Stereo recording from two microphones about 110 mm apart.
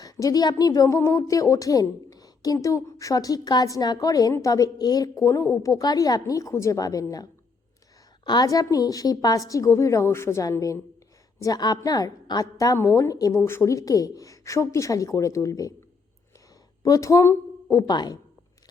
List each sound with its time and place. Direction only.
0.0 s a woman's voice: 35° left (ahead or behind)
16.8 s a woman's voice: 30° left (ahead or behind)